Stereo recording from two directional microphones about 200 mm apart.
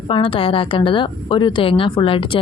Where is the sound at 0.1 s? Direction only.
25° left (ahead or behind).